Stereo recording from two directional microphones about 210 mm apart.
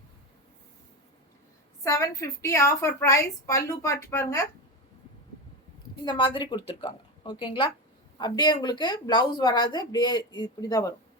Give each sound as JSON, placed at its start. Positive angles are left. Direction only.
{"t": 1.8, "sound": "a woman's voice", "side_deg": 15}
{"t": 6.1, "sound": "a woman's voice", "side_deg": 25}